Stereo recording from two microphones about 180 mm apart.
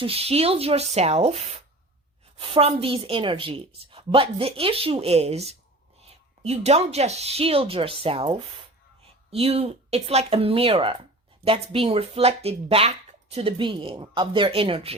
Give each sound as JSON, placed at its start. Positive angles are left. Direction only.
{"t": 0.0, "sound": "a woman's voice", "side_deg": -35}